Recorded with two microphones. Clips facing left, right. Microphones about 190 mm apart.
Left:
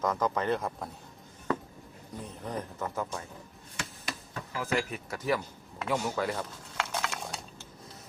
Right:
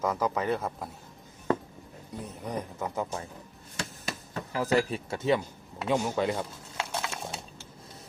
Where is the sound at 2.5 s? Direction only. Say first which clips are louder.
Right 2 dB; 15° right (ahead or behind).